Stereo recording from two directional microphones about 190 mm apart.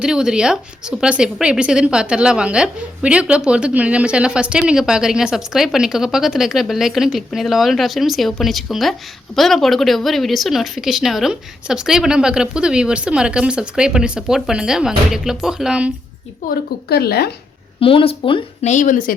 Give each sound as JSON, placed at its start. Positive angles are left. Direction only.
{"t": 0.0, "sound": "a woman's voice", "side_deg": -5}
{"t": 16.4, "sound": "a woman's voice", "side_deg": 45}
{"t": 16.9, "sound": "speech", "side_deg": 55}
{"t": 17.7, "sound": "speech", "side_deg": 30}